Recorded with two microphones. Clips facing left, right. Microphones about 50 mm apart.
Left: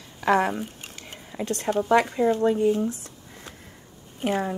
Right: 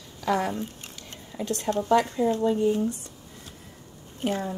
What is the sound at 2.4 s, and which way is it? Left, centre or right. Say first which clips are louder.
Speech: left 2 dB; left.